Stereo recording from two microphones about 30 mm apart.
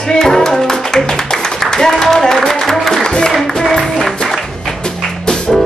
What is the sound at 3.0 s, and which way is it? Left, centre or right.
Music, left.